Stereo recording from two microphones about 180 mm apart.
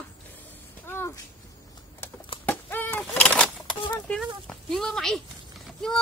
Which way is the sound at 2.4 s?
10° left (ahead or behind).